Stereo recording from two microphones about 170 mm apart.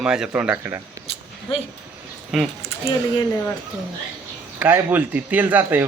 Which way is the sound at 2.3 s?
Centre (ahead or behind).